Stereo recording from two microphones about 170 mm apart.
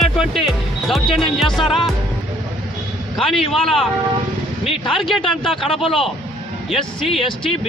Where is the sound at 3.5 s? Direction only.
Centre (ahead or behind).